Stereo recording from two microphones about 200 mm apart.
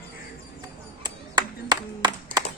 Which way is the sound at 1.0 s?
20° right (ahead or behind).